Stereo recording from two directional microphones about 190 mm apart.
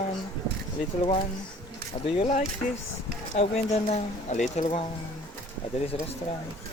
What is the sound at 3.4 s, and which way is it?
Speech, 35° left (ahead or behind).